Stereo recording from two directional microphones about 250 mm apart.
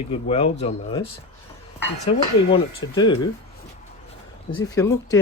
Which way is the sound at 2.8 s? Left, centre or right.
Centre.